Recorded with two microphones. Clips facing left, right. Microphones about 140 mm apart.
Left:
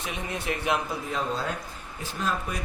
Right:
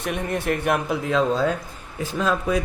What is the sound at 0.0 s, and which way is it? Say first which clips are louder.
Speech: right 7 dB; 55° right (ahead or behind).